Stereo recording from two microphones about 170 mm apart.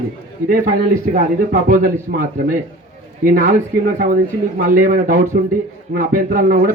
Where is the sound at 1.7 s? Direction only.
55° right (ahead or behind).